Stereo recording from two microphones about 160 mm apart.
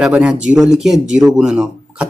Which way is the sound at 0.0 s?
Centre (ahead or behind).